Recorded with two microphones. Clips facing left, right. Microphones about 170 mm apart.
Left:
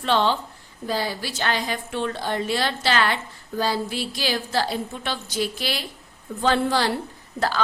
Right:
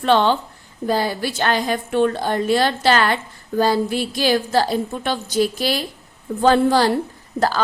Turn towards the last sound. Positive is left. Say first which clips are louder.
# right 4 dB
turn(degrees=-40)  # may be behind; listen again after turning